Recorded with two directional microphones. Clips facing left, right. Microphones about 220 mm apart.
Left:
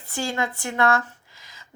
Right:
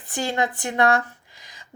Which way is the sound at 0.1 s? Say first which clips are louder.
Right 2 dB; 20° right (ahead or behind).